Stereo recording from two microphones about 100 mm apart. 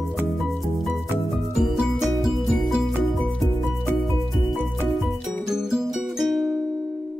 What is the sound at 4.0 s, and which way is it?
Music, centre (ahead or behind).